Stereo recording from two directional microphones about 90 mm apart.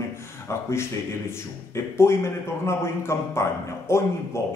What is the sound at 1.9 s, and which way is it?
Speech, 30° left (ahead or behind).